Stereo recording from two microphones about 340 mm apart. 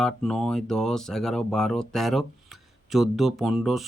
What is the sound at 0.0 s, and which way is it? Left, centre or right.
Speech, centre.